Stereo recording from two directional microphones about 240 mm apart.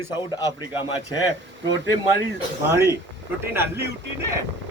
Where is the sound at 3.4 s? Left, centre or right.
Centre.